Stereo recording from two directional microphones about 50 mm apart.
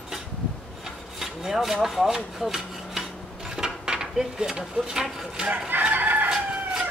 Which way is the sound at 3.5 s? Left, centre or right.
Centre.